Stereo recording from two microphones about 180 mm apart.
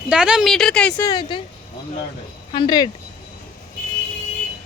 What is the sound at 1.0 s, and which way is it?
Speech, 20° left (ahead or behind).